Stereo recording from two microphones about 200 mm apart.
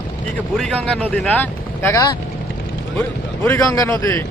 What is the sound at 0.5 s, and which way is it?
Speech, 5° left (ahead or behind).